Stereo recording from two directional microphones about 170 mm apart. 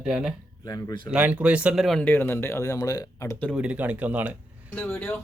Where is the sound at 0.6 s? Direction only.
20° left (ahead or behind).